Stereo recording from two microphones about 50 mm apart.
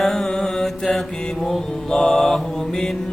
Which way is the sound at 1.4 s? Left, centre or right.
Centre.